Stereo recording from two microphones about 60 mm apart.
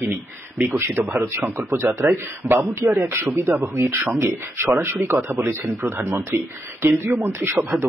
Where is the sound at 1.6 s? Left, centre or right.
Right.